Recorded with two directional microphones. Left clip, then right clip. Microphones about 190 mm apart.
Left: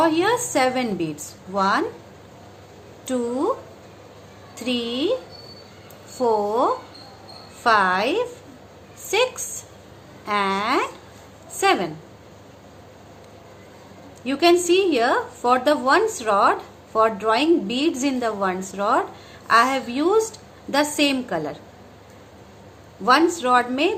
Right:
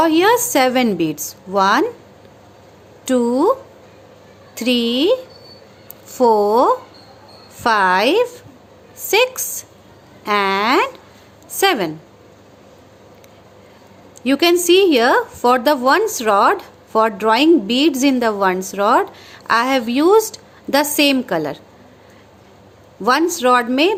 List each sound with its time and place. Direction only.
0.0 s a woman's voice: 55° right (ahead or behind)
3.1 s speech: 55° right (ahead or behind)
4.5 s a woman's voice: 55° right (ahead or behind)
6.1 s a woman's voice: 55° right (ahead or behind)
14.2 s a woman's voice: 55° right (ahead or behind)
23.4 s a woman's voice: 55° right (ahead or behind)